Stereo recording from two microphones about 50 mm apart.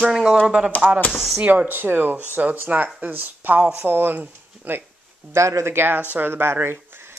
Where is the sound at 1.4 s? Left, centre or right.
Right.